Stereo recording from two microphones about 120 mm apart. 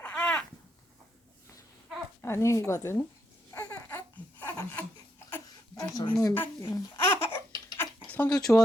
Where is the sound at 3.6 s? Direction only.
30° left (ahead or behind).